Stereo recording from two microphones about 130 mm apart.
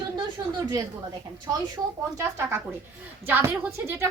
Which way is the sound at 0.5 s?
30° right (ahead or behind).